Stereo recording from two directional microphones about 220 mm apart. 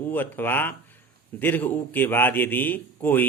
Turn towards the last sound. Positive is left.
turn(degrees=10)  # may be behind; listen again after turning